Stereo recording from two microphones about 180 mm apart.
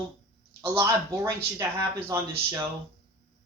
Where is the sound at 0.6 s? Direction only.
15° right (ahead or behind).